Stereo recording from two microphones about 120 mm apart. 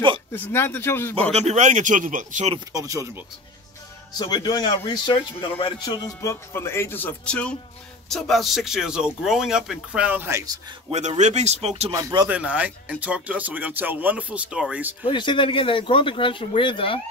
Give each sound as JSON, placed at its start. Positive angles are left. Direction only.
{"t": 0.3, "sound": "speech", "side_deg": 20}
{"t": 1.3, "sound": "speech", "side_deg": -70}
{"t": 2.7, "sound": "speech", "side_deg": -25}
{"t": 4.2, "sound": "a man's voice", "side_deg": 35}
{"t": 6.2, "sound": "speech", "side_deg": 20}
{"t": 10.9, "sound": "speech", "side_deg": -75}
{"t": 11.9, "sound": "speech", "side_deg": -30}
{"t": 12.3, "sound": "speech", "side_deg": -10}
{"t": 15.0, "sound": "speech", "side_deg": 40}